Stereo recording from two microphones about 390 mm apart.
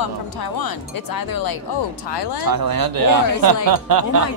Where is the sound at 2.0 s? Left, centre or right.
Left.